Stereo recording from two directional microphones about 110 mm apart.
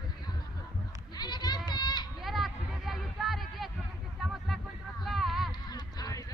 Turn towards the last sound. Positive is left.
turn(degrees=35)  # may be behind; listen again after turning